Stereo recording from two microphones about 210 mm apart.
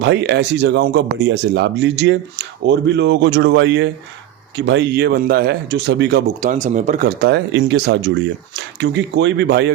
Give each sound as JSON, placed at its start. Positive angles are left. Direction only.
{"t": 0.0, "sound": "speech", "side_deg": -55}